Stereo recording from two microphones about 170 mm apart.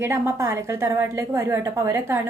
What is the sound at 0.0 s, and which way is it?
A woman's voice, 15° right (ahead or behind).